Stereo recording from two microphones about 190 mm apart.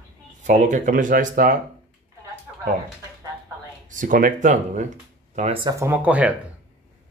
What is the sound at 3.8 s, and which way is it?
Speech, 45° right (ahead or behind).